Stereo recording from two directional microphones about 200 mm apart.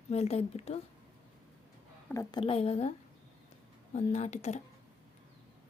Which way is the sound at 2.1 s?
15° left (ahead or behind).